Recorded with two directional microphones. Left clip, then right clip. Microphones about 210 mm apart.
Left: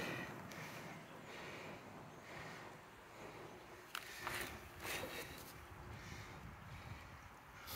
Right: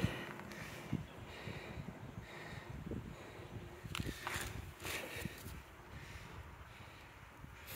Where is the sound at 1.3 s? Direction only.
5° right (ahead or behind).